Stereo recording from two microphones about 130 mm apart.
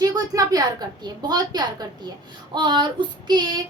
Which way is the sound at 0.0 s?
30° right (ahead or behind).